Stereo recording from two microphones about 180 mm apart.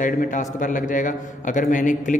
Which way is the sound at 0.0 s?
45° left (ahead or behind).